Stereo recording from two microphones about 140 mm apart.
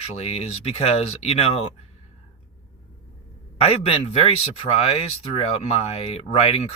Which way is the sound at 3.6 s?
45° left (ahead or behind).